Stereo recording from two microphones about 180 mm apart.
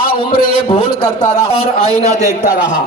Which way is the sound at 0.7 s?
30° left (ahead or behind).